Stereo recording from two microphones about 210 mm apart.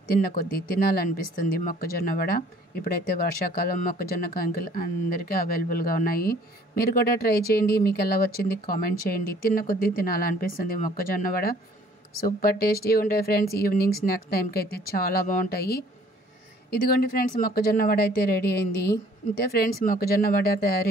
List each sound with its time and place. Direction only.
0.1 s speech: 45° left (ahead or behind)
16.9 s speech: 45° left (ahead or behind)